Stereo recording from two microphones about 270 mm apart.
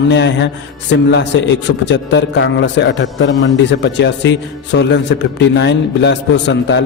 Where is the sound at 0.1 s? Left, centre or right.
Left.